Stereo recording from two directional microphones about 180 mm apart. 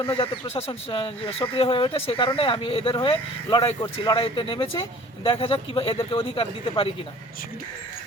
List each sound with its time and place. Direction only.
0.0 s speech: 30° left (ahead or behind)